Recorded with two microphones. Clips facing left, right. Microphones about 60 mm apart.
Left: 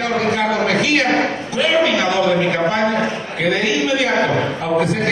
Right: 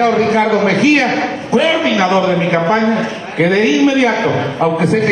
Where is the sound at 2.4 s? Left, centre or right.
Right.